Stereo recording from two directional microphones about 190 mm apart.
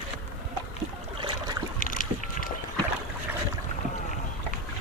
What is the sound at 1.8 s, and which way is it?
Boat, 45° left (ahead or behind).